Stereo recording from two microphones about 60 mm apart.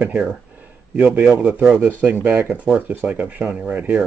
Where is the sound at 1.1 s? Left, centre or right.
Right.